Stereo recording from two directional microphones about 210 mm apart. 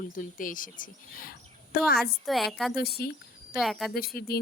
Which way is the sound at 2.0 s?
Centre (ahead or behind).